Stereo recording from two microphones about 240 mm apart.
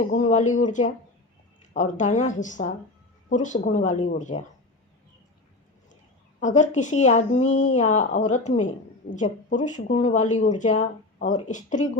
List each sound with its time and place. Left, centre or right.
0.1 s speech: left
6.4 s speech: left